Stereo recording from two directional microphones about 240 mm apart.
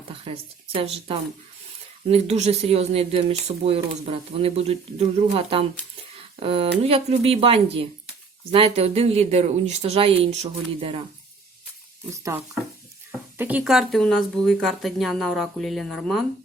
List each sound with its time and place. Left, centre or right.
0.7 s speech: right
12.1 s speech: centre